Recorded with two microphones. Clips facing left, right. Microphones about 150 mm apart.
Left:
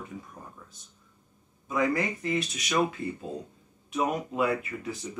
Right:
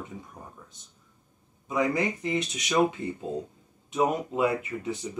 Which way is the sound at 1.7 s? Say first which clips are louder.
Right 1 dB; 20° right (ahead or behind).